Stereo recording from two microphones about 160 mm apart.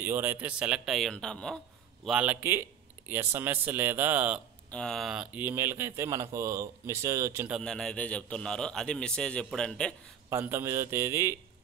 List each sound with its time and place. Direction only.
0.0 s a man's voice: 15° right (ahead or behind); by 1.6 s 5° left (ahead or behind)
2.0 s speech: 5° right (ahead or behind)
4.6 s speech: 5° left (ahead or behind); by 7.4 s 20° right (ahead or behind)
7.6 s a man's voice: 5° left (ahead or behind)
10.3 s speech: 15° right (ahead or behind)